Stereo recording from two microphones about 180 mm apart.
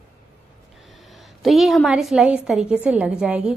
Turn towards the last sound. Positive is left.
turn(degrees=-5)  # may be behind; listen again after turning